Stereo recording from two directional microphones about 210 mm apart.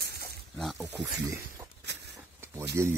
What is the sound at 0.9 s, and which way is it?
Speech, 15° right (ahead or behind).